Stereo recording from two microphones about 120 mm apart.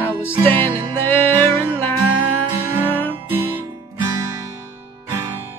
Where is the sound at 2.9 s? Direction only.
15° left (ahead or behind).